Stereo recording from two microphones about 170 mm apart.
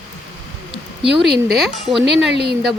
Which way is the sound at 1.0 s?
75° right (ahead or behind).